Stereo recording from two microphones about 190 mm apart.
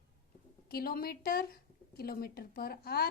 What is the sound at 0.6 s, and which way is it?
A child's voice, 50° left (ahead or behind).